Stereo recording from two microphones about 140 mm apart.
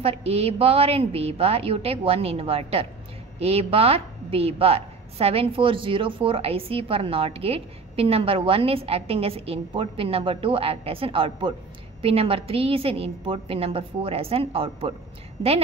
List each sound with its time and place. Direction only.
0.0 s a woman's voice: 45° right (ahead or behind)